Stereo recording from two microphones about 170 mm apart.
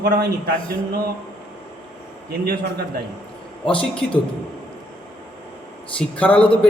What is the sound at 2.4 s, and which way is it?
Speech, 65° right (ahead or behind).